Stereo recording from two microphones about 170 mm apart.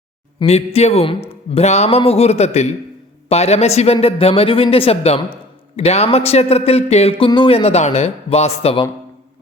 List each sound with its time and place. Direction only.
0.3 s a man's voice: 35° left (ahead or behind)